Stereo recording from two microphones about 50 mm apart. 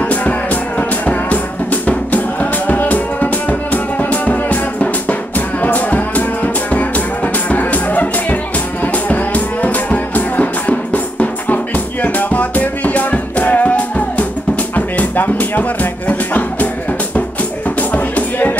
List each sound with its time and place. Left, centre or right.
0.0 s music: left
17.6 s music: left